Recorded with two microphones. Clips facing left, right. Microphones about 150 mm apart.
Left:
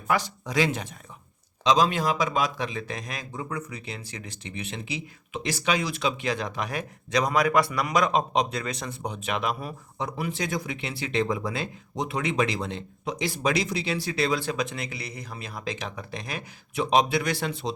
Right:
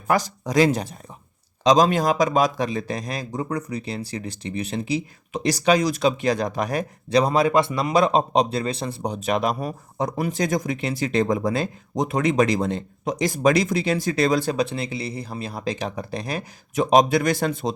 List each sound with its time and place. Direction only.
0.1 s a man's voice: 40° right (ahead or behind)